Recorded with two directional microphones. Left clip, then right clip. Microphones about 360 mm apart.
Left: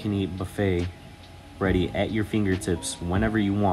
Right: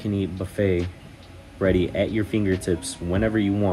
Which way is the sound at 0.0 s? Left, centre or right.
Centre.